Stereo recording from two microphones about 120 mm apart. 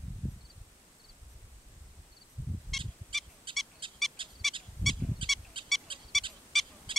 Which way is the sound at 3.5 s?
45° right (ahead or behind).